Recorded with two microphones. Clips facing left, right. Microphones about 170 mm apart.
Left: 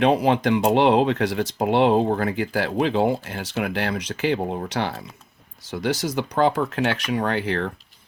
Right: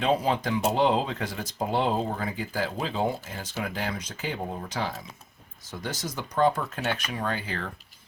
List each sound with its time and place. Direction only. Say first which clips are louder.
0.0 s speech: left 6 dB; 70° left (ahead or behind)
5.7 s speech: left 10 dB; 80° left